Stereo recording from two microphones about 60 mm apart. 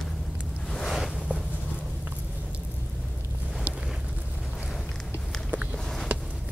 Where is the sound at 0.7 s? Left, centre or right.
Centre.